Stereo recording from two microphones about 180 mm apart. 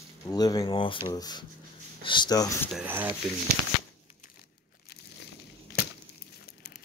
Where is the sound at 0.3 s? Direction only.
20° left (ahead or behind).